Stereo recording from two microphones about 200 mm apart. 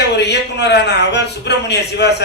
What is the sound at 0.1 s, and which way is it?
A man's voice, 60° left (ahead or behind).